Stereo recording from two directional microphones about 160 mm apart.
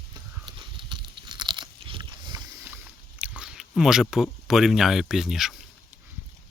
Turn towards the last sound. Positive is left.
turn(degrees=0)  # may be behind; listen again after turning